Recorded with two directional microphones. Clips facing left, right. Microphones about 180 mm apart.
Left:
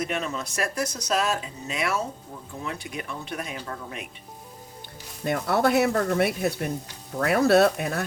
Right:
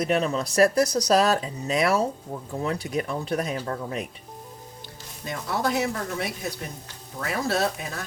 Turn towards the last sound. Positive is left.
turn(degrees=60)  # may be behind; listen again after turning